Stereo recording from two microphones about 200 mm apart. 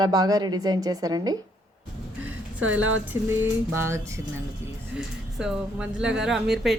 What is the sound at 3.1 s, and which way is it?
A woman's voice, 10° right (ahead or behind).